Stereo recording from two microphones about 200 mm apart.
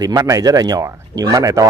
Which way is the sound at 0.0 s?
15° right (ahead or behind).